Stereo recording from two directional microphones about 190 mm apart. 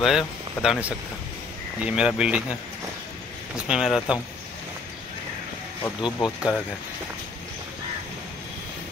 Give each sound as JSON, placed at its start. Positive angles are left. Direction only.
{"t": 0.0, "sound": "speech", "side_deg": 0}
{"t": 3.5, "sound": "speech", "side_deg": -5}
{"t": 6.2, "sound": "speech", "side_deg": 0}